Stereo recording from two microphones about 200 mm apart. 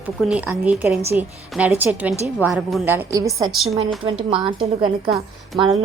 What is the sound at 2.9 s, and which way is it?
Speech, 15° right (ahead or behind).